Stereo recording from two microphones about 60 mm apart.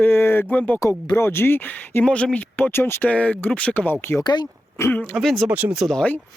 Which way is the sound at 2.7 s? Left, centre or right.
Left.